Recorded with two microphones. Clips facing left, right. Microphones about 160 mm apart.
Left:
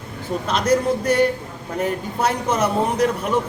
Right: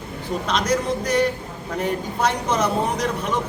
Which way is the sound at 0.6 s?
30° left (ahead or behind).